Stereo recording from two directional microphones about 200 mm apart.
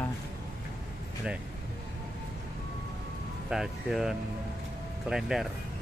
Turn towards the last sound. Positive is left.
turn(degrees=0)  # may be behind; listen again after turning